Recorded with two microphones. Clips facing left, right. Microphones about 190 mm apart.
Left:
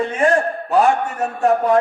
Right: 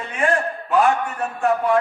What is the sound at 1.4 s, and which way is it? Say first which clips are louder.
Speech: left 3 dB; 40° left (ahead or behind).